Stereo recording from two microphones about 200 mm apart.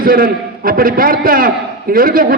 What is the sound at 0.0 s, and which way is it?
A man's voice, 45° right (ahead or behind).